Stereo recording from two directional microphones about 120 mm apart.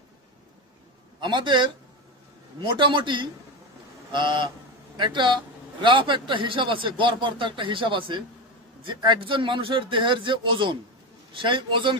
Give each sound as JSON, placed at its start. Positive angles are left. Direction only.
{"t": 1.2, "sound": "a man's voice", "side_deg": -40}